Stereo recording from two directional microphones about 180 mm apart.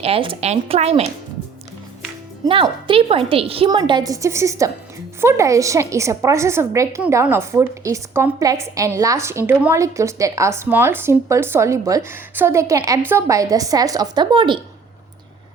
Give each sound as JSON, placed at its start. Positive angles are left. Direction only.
{"t": 0.0, "sound": "a woman's voice", "side_deg": -30}
{"t": 2.5, "sound": "a woman's voice", "side_deg": -30}